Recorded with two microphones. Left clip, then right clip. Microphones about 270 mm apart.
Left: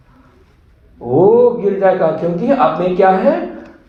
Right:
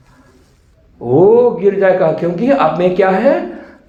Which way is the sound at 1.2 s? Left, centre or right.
Right.